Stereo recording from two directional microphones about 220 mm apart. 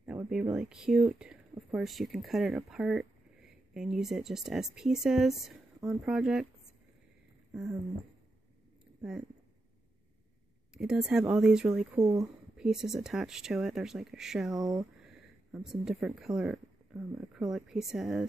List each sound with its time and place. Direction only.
0.0 s speech: 5° right (ahead or behind)
10.7 s speech: centre (ahead or behind)
12.0 s speech: 15° right (ahead or behind)
12.5 s speech: centre (ahead or behind)
14.5 s speech: 15° right (ahead or behind)
15.5 s speech: centre (ahead or behind)